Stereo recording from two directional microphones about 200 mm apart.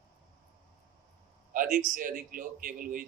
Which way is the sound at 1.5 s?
40° right (ahead or behind).